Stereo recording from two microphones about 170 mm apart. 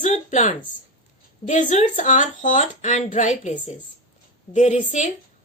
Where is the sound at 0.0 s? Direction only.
45° left (ahead or behind).